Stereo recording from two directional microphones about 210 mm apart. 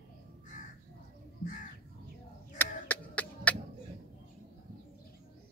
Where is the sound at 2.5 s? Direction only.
5° left (ahead or behind).